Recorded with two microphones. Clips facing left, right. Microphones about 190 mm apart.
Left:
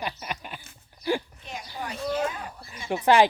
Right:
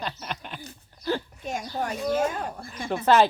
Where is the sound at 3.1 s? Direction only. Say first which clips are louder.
Even; 15° left (ahead or behind).